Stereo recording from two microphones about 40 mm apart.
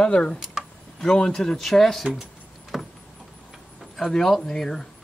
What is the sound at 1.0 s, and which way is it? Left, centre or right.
Speech, left.